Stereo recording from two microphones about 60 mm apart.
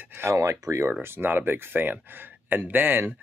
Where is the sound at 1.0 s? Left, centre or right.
Right.